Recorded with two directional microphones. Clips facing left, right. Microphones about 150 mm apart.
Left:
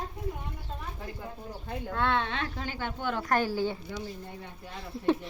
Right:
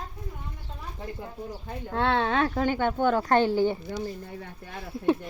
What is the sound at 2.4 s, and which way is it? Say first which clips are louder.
Speech: right 10 dB; 60° right (ahead or behind).